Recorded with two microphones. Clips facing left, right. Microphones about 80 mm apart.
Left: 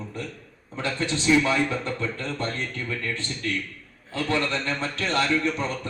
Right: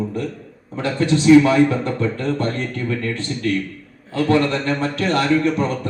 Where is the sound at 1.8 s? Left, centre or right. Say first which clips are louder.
Right 8 dB; right.